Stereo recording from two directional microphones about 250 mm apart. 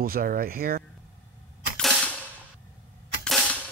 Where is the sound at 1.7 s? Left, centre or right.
Centre.